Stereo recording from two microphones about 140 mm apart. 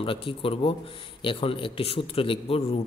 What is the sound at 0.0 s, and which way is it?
A man's voice, 40° left (ahead or behind).